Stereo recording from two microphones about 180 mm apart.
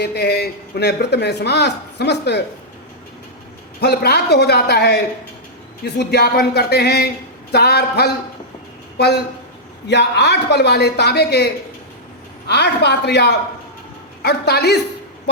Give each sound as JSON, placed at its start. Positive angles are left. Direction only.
{"t": 0.0, "sound": "a man's voice", "side_deg": 65}
{"t": 3.8, "sound": "speech", "side_deg": 65}
{"t": 9.8, "sound": "a man's voice", "side_deg": 70}
{"t": 12.5, "sound": "a man's voice", "side_deg": 70}